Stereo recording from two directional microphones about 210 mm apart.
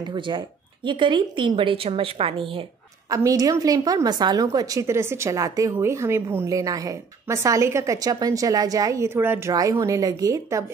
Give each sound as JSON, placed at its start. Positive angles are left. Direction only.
{"t": 0.0, "sound": "a woman's voice", "side_deg": -20}